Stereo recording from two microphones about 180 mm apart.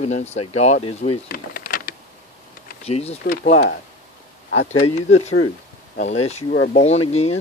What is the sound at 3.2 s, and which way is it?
Speech, 50° left (ahead or behind).